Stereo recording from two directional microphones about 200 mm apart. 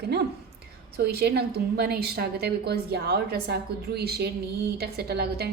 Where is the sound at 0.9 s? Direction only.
55° right (ahead or behind).